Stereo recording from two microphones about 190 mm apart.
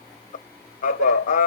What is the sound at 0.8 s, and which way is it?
Speech, 45° left (ahead or behind).